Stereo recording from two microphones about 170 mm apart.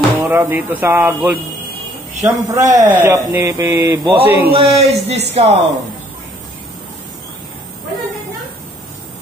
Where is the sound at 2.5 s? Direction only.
15° right (ahead or behind).